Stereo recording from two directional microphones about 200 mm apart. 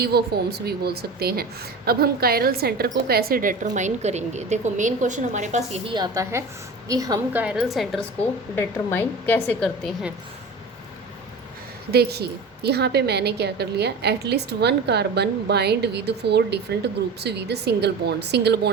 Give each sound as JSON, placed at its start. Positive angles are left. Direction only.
{"t": 0.0, "sound": "a woman's voice", "side_deg": -50}
{"t": 7.4, "sound": "a woman's voice", "side_deg": 0}
{"t": 11.9, "sound": "a woman's voice", "side_deg": -55}